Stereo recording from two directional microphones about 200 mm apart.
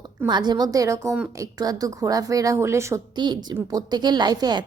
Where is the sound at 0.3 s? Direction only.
20° right (ahead or behind).